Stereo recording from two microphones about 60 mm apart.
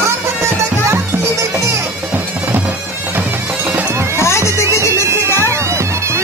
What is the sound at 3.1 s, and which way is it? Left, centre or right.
Bagpipes, right.